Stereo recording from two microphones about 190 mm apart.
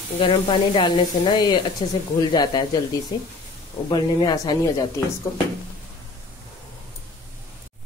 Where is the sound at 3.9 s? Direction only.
20° left (ahead or behind).